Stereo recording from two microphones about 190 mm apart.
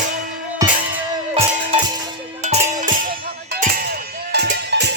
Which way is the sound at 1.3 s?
30° right (ahead or behind).